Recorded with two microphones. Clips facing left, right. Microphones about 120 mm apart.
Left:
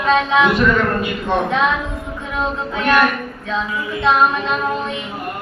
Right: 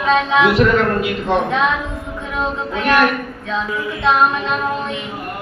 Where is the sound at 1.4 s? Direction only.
Centre (ahead or behind).